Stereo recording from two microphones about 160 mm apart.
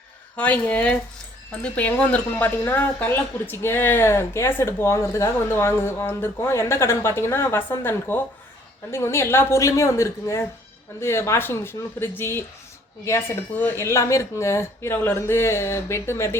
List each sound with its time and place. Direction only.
0.3 s speech: 10° left (ahead or behind)